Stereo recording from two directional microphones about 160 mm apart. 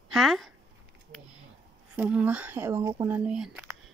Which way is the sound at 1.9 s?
10° right (ahead or behind).